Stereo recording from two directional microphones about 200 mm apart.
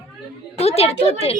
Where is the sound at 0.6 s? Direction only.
30° left (ahead or behind).